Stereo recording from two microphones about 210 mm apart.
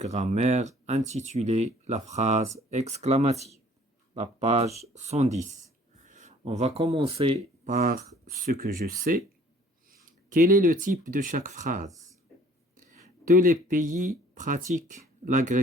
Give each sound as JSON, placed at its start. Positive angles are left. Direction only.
{"t": 0.0, "sound": "speech", "side_deg": -30}